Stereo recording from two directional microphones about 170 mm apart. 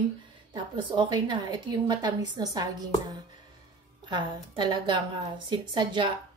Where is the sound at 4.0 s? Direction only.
25° right (ahead or behind).